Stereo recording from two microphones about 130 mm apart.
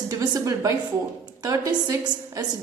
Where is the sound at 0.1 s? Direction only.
25° right (ahead or behind).